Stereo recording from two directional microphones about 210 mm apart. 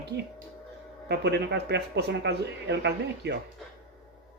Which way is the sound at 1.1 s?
50° right (ahead or behind).